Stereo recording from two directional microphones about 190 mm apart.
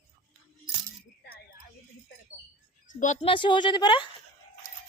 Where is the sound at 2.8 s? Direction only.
40° left (ahead or behind); by 4.1 s 25° left (ahead or behind).